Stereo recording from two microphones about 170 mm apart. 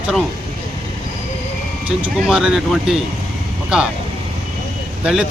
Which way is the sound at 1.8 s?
5° right (ahead or behind).